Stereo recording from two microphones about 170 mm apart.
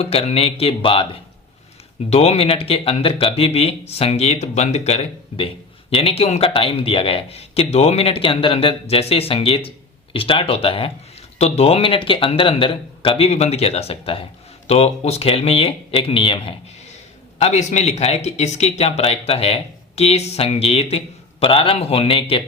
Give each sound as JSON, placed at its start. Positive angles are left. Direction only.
{"t": 0.0, "sound": "speech", "side_deg": 35}
{"t": 2.0, "sound": "speech", "side_deg": 35}
{"t": 17.4, "sound": "speech", "side_deg": 45}